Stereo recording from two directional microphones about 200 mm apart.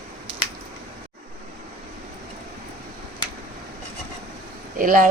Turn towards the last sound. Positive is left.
turn(degrees=-45)  # may be behind; listen again after turning